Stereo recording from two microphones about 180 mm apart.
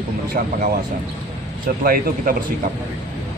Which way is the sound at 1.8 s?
50° right (ahead or behind).